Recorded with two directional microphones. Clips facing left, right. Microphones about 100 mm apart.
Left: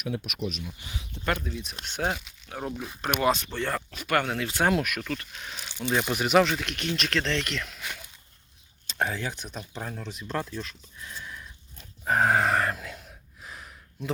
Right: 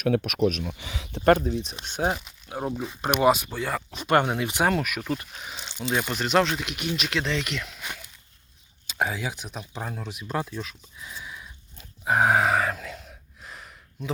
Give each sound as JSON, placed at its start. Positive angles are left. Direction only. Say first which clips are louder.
{"t": 0.1, "sound": "speech", "louder": "right 9 dB", "side_deg": -65}
{"t": 1.2, "sound": "speech", "louder": "right 10 dB", "side_deg": -40}
{"t": 1.8, "sound": "speech", "louder": "right 1 dB", "side_deg": -15}
{"t": 3.9, "sound": "speech", "louder": "right 6 dB", "side_deg": -25}
{"t": 4.6, "sound": "speech", "louder": "even", "side_deg": 0}
{"t": 5.5, "sound": "speech", "louder": "right 2 dB", "side_deg": -20}
{"t": 5.8, "sound": "speech", "louder": "even", "side_deg": -5}
{"t": 6.1, "sound": "speech", "louder": "left 1 dB", "side_deg": 5}
{"t": 8.9, "sound": "speech", "louder": "right 1 dB", "side_deg": -10}